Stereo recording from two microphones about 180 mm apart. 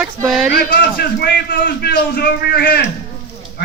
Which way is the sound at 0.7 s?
55° left (ahead or behind).